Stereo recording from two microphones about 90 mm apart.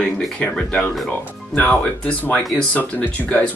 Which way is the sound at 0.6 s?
10° left (ahead or behind).